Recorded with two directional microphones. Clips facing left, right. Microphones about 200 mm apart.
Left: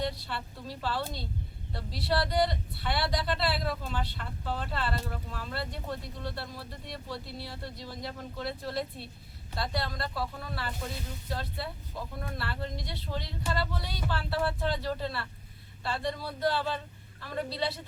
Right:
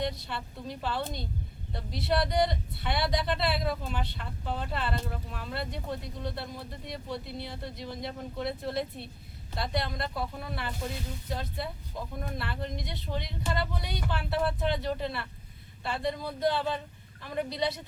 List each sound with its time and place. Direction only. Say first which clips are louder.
0.0 s speech: right 1 dB; 20° right (ahead or behind)